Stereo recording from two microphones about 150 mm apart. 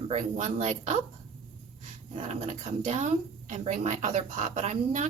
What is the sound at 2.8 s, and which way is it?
A woman's voice, 50° right (ahead or behind).